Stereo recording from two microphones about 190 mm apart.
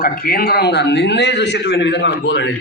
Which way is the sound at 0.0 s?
50° left (ahead or behind).